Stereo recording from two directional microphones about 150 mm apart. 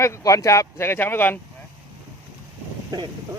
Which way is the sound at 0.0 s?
20° left (ahead or behind).